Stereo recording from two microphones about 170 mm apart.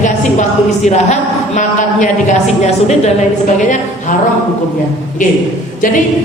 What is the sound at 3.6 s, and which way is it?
Speech, 50° left (ahead or behind).